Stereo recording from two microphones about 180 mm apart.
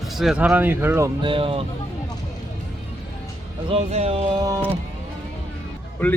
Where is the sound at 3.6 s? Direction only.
35° right (ahead or behind).